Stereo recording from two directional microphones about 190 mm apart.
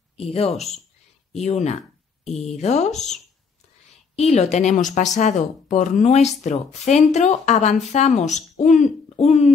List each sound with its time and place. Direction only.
0.2 s speech: 30° left (ahead or behind)
4.1 s speech: 35° left (ahead or behind)